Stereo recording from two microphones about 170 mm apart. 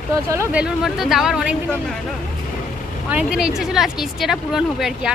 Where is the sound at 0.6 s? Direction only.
Centre (ahead or behind).